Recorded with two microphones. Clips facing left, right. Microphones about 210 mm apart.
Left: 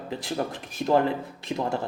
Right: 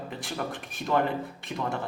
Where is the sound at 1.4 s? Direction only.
25° left (ahead or behind).